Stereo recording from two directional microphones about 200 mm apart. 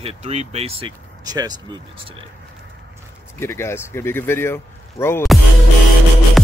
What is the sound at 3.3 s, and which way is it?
Speech, 15° left (ahead or behind).